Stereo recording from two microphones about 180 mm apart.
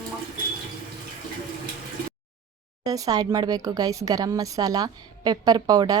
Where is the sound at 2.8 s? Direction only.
20° right (ahead or behind).